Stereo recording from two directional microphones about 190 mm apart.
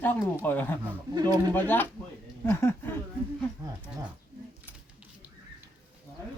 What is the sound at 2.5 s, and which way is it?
Speech, 15° left (ahead or behind).